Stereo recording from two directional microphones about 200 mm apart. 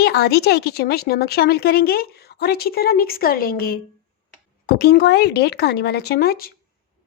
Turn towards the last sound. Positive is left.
turn(degrees=50)  # may be behind; listen again after turning